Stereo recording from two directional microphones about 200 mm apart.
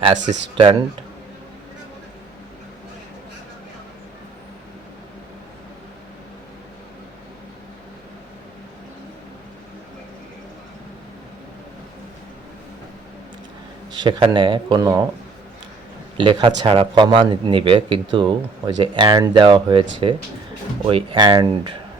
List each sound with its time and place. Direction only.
0.5 s speech: 25° right (ahead or behind)
13.9 s speech: 20° right (ahead or behind)
16.1 s speech: 25° right (ahead or behind)